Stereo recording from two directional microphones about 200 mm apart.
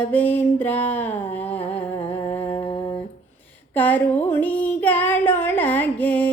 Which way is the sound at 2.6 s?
25° left (ahead or behind).